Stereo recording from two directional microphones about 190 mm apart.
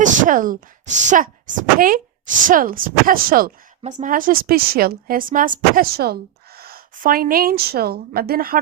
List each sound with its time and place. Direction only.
0.0 s speech: 40° right (ahead or behind)